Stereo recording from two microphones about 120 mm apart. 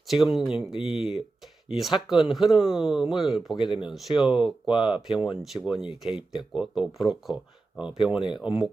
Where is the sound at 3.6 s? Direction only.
45° left (ahead or behind).